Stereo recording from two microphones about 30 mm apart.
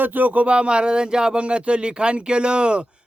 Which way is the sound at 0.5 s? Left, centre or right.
Right.